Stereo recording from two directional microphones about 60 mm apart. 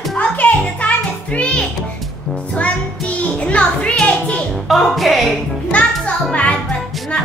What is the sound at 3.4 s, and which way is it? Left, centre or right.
Music, centre.